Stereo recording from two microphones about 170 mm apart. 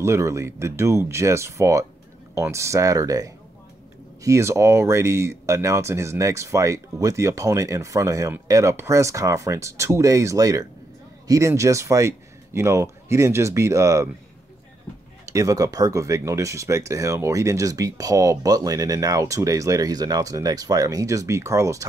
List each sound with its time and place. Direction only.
0.0 s speech: 15° right (ahead or behind)
15.3 s speech: 20° right (ahead or behind)